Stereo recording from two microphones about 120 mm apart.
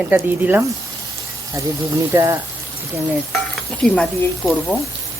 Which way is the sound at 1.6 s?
30° right (ahead or behind).